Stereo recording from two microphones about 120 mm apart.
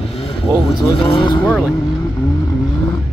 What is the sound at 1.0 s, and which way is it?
Speech, 40° left (ahead or behind).